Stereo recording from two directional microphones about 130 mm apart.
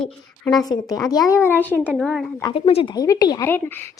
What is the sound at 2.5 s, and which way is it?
Speech, 50° left (ahead or behind).